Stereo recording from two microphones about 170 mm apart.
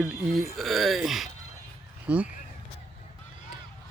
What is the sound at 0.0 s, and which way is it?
Speech, centre (ahead or behind).